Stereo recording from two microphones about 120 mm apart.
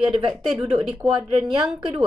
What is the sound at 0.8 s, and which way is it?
A woman's voice, centre (ahead or behind).